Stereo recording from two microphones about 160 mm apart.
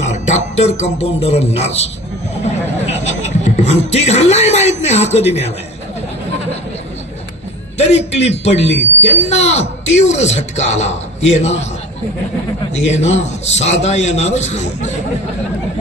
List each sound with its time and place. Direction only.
0.0 s music: 45° left (ahead or behind)
2.9 s speech: 45° left (ahead or behind)
7.8 s a man's voice: 40° left (ahead or behind)
12.7 s speech: 45° left (ahead or behind)